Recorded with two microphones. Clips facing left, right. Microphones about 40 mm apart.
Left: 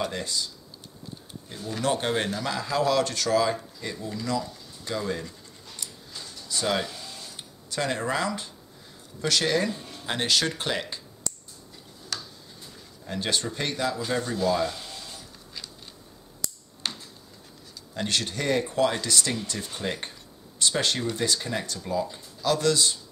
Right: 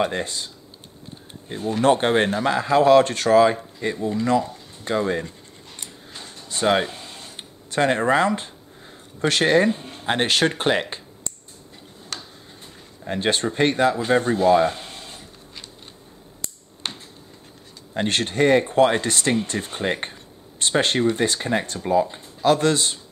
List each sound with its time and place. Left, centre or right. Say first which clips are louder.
0.0 s speech: right 6 dB; right
1.5 s speech: right 9 dB; right
5.8 s a sound: right 2 dB; right
9.2 s speech: right 7 dB; right
12.1 s tick-tock: right 1 dB; right
13.0 s speech: right 6 dB; right
16.4 s a sound: right 1 dB; right
17.9 s speech: right 7 dB; right